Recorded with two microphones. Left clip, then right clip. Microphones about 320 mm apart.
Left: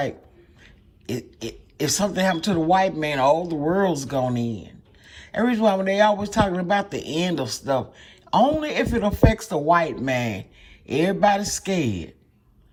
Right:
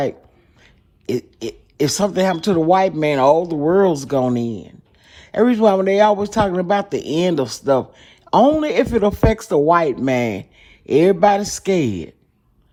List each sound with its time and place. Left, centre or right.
0.6 s speech: centre